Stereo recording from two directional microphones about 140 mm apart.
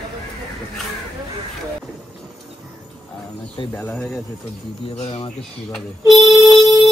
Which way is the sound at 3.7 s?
10° left (ahead or behind).